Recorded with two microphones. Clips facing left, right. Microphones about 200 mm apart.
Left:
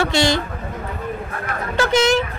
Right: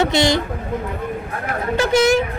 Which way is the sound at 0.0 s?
20° right (ahead or behind).